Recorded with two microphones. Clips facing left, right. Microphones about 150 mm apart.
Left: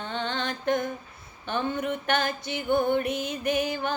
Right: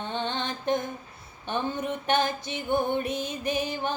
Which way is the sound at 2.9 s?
60° left (ahead or behind).